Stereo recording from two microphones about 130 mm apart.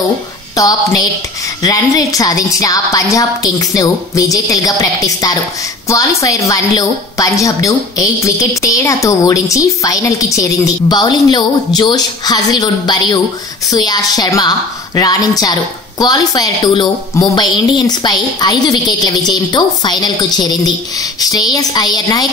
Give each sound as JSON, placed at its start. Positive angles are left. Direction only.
{"t": 0.6, "sound": "a woman's voice", "side_deg": 25}